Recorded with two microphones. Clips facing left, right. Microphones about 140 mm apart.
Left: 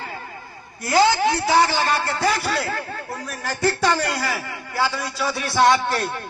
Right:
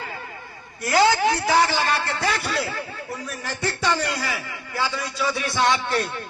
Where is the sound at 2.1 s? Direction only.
Centre (ahead or behind).